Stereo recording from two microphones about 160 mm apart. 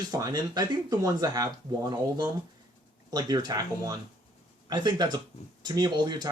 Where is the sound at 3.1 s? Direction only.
25° right (ahead or behind).